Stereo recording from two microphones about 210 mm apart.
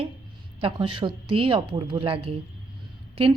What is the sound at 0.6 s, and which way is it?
A woman's voice, 25° right (ahead or behind).